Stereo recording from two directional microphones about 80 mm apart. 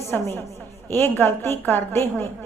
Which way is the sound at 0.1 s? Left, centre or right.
Left.